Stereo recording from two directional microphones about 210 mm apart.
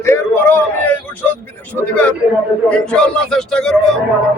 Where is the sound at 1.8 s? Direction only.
5° left (ahead or behind).